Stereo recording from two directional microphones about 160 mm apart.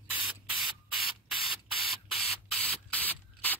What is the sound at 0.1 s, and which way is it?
Spray, 5° right (ahead or behind).